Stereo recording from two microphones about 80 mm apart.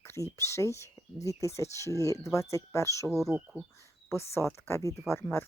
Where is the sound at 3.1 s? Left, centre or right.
Centre.